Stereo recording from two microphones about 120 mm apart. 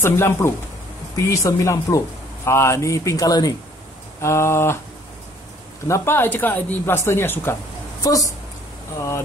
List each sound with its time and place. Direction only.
0.0 s a woman's voice: 20° left (ahead or behind)
5.9 s a woman's voice: 20° left (ahead or behind)
8.0 s a woman's voice: 30° left (ahead or behind)